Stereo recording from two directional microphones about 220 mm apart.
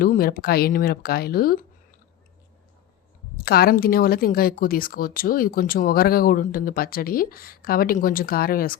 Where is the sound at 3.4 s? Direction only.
45° left (ahead or behind).